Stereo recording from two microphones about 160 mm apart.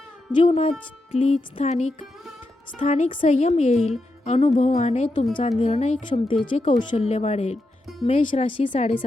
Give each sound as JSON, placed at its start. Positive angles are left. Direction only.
{"t": 0.3, "sound": "speech", "side_deg": 35}
{"t": 4.2, "sound": "music", "side_deg": 50}
{"t": 4.7, "sound": "speech", "side_deg": 45}